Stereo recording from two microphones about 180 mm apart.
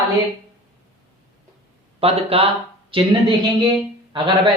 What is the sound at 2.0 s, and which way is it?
Speech, 35° right (ahead or behind).